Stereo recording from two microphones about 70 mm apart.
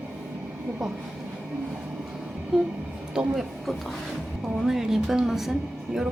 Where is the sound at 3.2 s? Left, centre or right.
Centre.